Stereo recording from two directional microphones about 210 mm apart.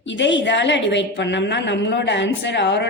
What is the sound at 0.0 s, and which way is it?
A woman's voice, 60° left (ahead or behind).